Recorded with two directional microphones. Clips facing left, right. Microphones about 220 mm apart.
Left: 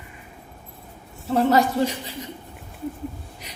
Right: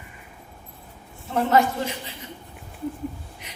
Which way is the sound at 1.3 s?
35° left (ahead or behind).